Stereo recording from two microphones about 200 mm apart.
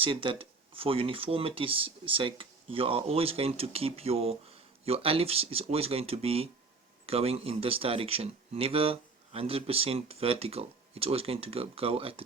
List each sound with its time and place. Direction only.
0.0 s speech: 25° right (ahead or behind)